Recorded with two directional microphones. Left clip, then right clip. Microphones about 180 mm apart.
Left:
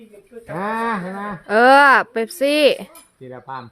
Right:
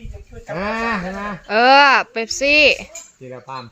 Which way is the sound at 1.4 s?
35° left (ahead or behind).